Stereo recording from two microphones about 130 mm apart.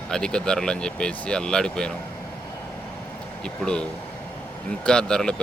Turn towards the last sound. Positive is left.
turn(degrees=5)  # may be behind; listen again after turning